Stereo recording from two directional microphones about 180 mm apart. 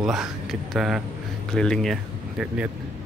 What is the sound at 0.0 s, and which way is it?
Speech, centre (ahead or behind).